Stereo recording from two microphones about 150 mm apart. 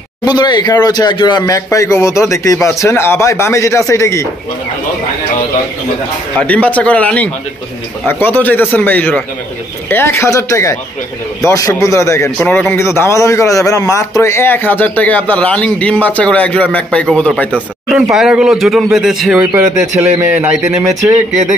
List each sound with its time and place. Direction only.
0.2 s speech: 30° left (ahead or behind)
6.4 s a man's voice: 10° left (ahead or behind)
18.1 s a man's voice: 5° right (ahead or behind)
19.3 s speech: 15° right (ahead or behind)